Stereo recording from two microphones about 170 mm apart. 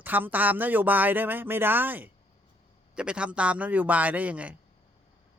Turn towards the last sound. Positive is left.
turn(degrees=-10)  # may be behind; listen again after turning